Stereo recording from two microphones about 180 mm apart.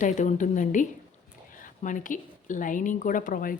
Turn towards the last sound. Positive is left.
turn(degrees=50)  # may be behind; listen again after turning